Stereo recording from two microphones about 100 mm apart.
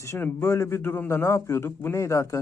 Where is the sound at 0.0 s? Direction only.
25° left (ahead or behind).